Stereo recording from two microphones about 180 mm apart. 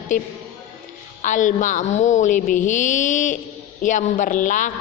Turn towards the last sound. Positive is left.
turn(degrees=45)  # may be behind; listen again after turning